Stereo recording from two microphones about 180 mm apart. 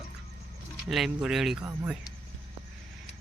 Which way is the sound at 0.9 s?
Centre (ahead or behind).